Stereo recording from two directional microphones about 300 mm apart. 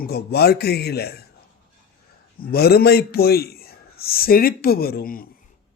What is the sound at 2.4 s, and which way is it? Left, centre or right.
Speech, left.